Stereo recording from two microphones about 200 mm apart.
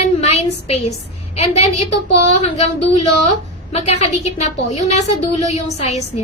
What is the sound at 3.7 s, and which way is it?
Speech, 35° left (ahead or behind).